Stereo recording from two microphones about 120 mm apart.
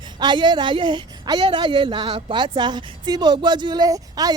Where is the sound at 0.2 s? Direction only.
40° right (ahead or behind).